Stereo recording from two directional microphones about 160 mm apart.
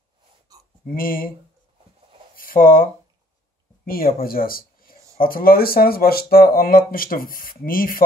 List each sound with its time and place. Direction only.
0.8 s speech: 60° left (ahead or behind)
2.3 s speech: 60° left (ahead or behind)